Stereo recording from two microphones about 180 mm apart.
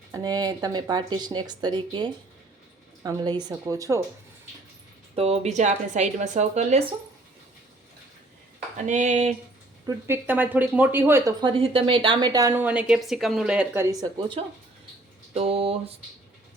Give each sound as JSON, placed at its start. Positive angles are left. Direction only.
{"t": 0.1, "sound": "speech", "side_deg": -20}
{"t": 5.1, "sound": "a woman's voice", "side_deg": -35}
{"t": 8.9, "sound": "speech", "side_deg": -40}
{"t": 9.8, "sound": "speech", "side_deg": -10}
{"t": 11.3, "sound": "speech", "side_deg": -25}
{"t": 14.0, "sound": "a woman's voice", "side_deg": -25}